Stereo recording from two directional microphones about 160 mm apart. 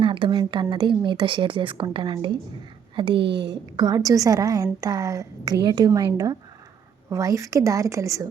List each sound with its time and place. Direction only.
0.0 s a woman's voice: 30° right (ahead or behind)
3.2 s a woman's voice: 90° right
3.8 s a woman's voice: 25° right (ahead or behind)